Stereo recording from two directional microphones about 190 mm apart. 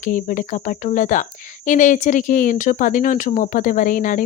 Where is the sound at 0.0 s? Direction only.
45° left (ahead or behind).